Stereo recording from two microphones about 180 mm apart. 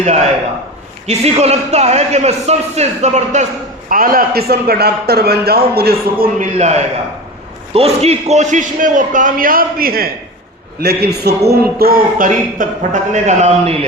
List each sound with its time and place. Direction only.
0.0 s a man's voice: 40° right (ahead or behind)
3.8 s a man's voice: 55° right (ahead or behind)
6.6 s a man's voice: 35° right (ahead or behind)